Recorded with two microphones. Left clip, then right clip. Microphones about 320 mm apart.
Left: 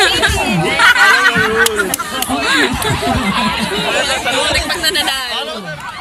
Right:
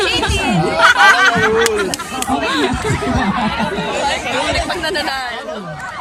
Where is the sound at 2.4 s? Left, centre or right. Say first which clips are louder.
Left 6 dB; centre.